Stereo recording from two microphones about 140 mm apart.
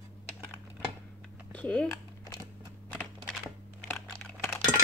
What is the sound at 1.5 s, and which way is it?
Speech, 10° left (ahead or behind).